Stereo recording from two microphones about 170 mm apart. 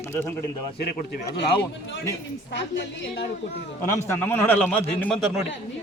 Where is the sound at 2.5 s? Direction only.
90° left.